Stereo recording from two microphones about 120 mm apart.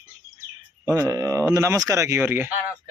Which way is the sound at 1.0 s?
25° right (ahead or behind).